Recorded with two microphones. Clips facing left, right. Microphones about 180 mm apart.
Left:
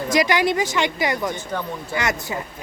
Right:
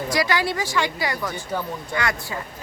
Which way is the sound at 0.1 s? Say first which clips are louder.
Left 5 dB; 20° left (ahead or behind).